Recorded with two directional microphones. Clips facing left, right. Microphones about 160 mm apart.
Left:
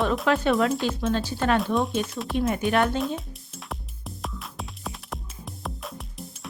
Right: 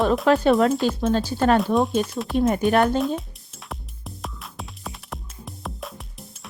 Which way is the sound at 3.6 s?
Centre (ahead or behind).